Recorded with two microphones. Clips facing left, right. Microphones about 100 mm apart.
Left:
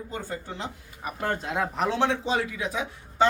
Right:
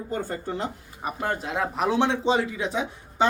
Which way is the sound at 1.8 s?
15° right (ahead or behind).